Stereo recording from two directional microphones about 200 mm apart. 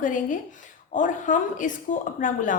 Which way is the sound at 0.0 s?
40° left (ahead or behind).